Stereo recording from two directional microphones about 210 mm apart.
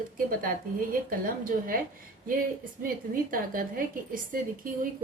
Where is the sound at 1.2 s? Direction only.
40° right (ahead or behind).